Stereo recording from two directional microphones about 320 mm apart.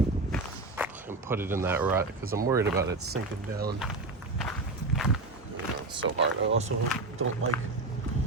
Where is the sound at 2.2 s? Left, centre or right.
Right.